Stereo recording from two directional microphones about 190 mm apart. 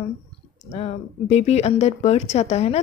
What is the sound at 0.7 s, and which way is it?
Speech, 35° left (ahead or behind).